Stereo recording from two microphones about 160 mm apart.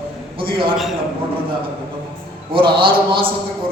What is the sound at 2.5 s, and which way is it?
Speech, 35° right (ahead or behind).